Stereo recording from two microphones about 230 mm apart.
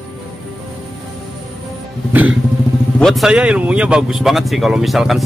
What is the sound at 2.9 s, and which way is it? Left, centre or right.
A man's voice, centre.